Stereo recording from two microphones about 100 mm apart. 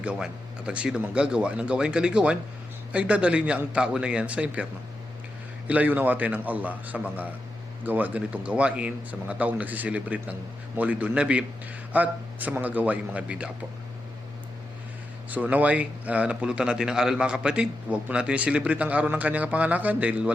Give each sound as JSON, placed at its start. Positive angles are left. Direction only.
{"t": 0.0, "sound": "a man's voice", "side_deg": -10}
{"t": 5.6, "sound": "a man's voice", "side_deg": -15}
{"t": 15.3, "sound": "a man's voice", "side_deg": -15}